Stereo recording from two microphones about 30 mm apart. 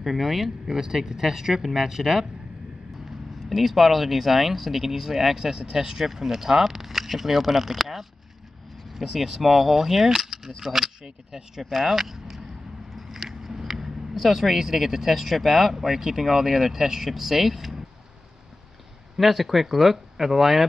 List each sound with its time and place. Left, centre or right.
0.0 s speech: centre
0.7 s speech: centre
1.6 s speech: centre
1.9 s speech: centre
3.4 s speech: centre
12.9 s biting: centre
14.1 s speech: centre
15.7 s speech: centre
19.1 s speech: centre